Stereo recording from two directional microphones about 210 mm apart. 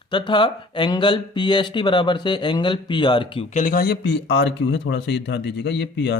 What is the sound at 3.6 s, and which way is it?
A man's voice, 45° left (ahead or behind).